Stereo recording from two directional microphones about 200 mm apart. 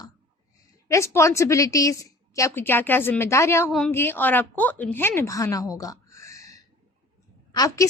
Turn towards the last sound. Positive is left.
turn(degrees=20)  # may be behind; listen again after turning